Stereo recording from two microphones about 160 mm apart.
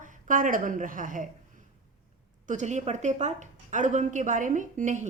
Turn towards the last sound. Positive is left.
turn(degrees=-50)  # may be behind; listen again after turning